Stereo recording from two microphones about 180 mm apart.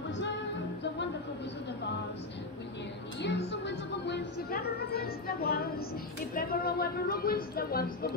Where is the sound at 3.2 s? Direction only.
70° left (ahead or behind).